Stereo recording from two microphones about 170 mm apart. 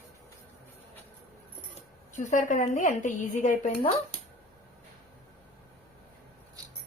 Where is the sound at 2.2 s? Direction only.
45° left (ahead or behind).